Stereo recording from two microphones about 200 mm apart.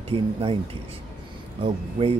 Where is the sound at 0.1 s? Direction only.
25° right (ahead or behind).